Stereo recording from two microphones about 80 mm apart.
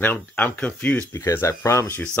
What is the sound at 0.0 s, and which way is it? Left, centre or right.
Speech, left.